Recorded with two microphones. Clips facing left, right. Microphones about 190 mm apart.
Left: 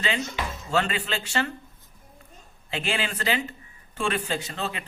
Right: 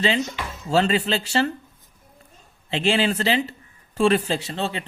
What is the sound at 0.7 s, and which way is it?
Speech, 35° right (ahead or behind).